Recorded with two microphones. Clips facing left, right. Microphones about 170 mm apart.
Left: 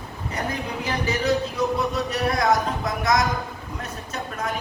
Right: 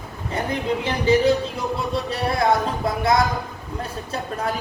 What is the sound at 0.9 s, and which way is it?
Speech, 30° right (ahead or behind).